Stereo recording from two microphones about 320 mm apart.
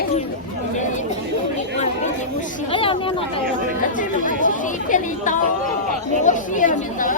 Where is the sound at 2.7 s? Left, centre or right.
Centre.